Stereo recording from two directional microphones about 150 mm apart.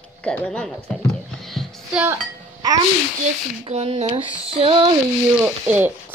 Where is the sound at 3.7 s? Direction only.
45° right (ahead or behind).